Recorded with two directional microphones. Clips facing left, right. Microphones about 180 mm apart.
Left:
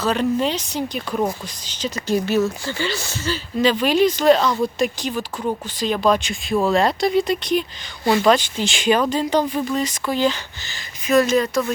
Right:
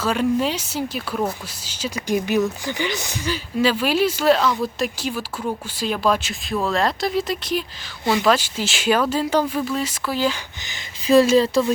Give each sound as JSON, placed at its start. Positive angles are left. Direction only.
{"t": 0.0, "sound": "speech", "side_deg": -5}
{"t": 11.0, "sound": "speech", "side_deg": -30}